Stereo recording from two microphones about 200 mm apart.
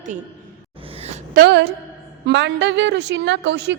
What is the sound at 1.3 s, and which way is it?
A woman's voice, 55° right (ahead or behind).